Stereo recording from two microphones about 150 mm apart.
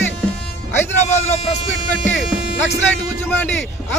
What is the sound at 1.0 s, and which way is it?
Speech, 50° left (ahead or behind).